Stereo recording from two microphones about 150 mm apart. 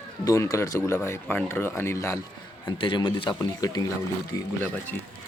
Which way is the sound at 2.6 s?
35° left (ahead or behind).